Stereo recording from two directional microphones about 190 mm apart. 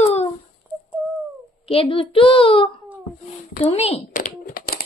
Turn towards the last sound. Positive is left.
turn(degrees=50)  # may be behind; listen again after turning